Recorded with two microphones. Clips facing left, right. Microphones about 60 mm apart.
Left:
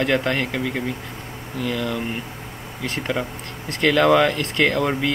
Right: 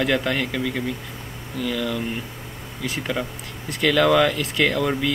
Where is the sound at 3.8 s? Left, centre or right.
Left.